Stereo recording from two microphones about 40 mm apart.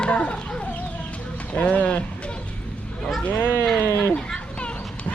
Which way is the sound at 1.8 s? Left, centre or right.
Left.